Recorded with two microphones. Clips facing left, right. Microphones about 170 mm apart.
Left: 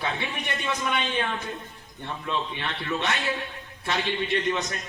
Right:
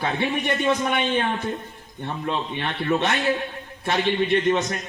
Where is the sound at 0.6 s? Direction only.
55° right (ahead or behind).